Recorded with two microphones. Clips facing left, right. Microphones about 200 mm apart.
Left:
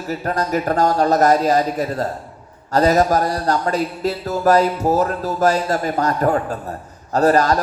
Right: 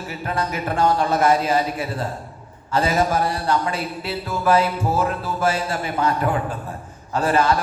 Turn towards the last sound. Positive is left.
turn(degrees=40)  # may be behind; listen again after turning